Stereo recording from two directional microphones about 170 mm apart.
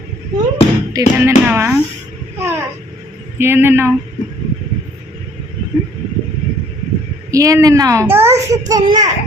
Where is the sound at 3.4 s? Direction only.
15° right (ahead or behind).